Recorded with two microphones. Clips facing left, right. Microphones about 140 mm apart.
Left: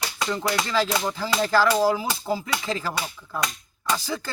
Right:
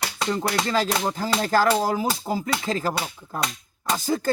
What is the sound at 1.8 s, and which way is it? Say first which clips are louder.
Speech: left 1 dB; 45° right (ahead or behind).